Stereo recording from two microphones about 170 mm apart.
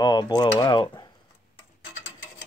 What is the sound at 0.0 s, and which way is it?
Speech, 25° left (ahead or behind).